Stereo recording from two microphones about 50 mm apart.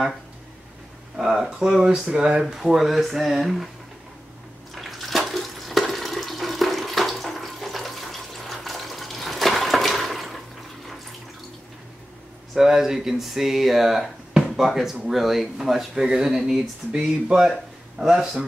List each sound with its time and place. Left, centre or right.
1.1 s speech: centre
2.5 s speech: centre
4.7 s water: centre
12.5 s speech: centre